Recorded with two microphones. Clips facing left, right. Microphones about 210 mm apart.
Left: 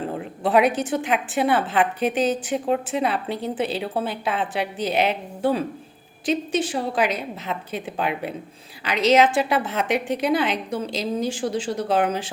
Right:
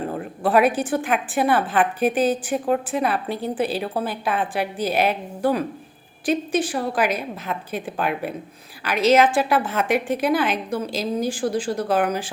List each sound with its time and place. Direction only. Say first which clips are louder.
0.4 s a woman's voice: right 1 dB; 20° left (ahead or behind)